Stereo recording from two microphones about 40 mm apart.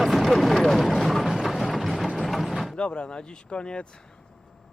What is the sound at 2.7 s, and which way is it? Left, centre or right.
Speech, left.